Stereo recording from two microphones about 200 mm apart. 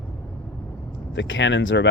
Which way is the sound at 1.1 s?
65° left (ahead or behind).